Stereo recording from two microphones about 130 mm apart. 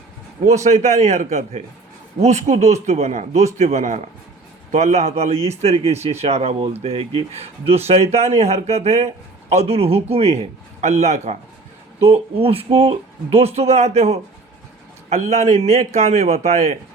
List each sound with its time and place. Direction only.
0.4 s a man's voice: 65° right (ahead or behind)
12.4 s a man's voice: 50° right (ahead or behind)